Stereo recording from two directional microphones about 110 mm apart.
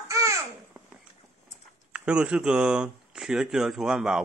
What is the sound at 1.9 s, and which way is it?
Speech, 10° right (ahead or behind).